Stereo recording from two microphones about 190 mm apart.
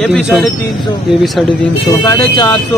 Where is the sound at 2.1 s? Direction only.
15° left (ahead or behind).